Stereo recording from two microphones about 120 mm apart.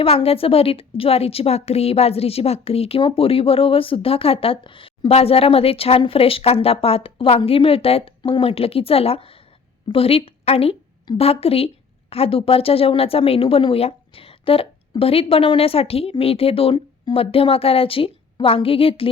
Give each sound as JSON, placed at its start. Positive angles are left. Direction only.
{"t": 0.0, "sound": "a woman's voice", "side_deg": 55}